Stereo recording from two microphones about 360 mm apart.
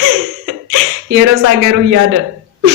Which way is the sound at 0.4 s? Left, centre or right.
Right.